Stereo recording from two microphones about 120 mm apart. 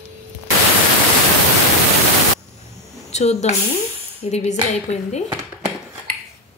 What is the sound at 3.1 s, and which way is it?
Speech, 65° left (ahead or behind).